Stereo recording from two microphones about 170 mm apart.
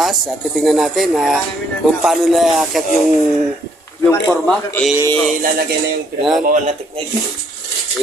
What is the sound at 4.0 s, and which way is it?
Speech, 15° left (ahead or behind).